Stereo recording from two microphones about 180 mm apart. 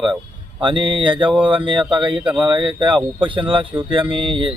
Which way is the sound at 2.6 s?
25° right (ahead or behind).